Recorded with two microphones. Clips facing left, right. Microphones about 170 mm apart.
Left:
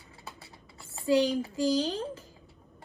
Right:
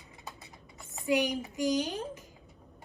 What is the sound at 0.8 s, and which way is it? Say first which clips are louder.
A child's voice: left 4 dB; 20° right (ahead or behind).